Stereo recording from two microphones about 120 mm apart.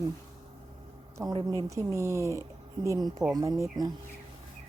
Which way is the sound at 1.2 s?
30° right (ahead or behind).